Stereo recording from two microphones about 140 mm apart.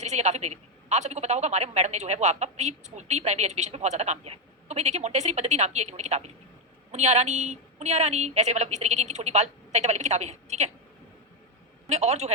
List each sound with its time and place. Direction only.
0.0 s a woman's voice: 55° right (ahead or behind)
11.9 s a woman's voice: 50° right (ahead or behind)